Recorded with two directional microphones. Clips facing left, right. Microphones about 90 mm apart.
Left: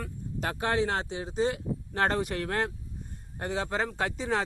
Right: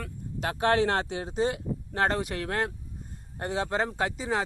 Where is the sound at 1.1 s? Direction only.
45° right (ahead or behind).